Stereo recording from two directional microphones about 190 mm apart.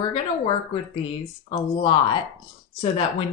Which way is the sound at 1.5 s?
25° left (ahead or behind).